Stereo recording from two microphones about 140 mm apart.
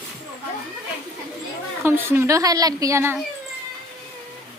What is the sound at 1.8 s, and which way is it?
A woman's voice, 15° right (ahead or behind).